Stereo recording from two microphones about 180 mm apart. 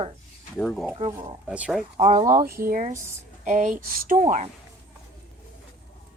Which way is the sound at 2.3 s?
55° right (ahead or behind).